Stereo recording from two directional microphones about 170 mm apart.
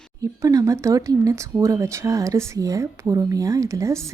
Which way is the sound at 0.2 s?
20° right (ahead or behind).